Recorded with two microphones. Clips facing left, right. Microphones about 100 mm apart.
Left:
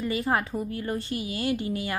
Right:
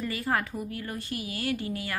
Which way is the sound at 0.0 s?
20° left (ahead or behind).